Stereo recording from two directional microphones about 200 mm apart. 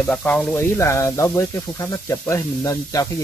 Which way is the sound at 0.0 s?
5° left (ahead or behind).